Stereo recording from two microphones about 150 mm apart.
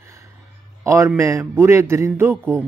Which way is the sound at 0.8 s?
20° right (ahead or behind).